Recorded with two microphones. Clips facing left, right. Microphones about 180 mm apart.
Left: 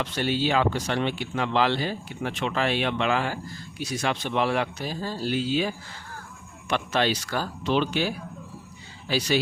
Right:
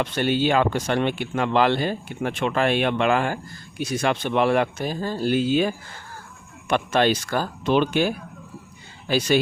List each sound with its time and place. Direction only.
0.0 s speech: 55° right (ahead or behind)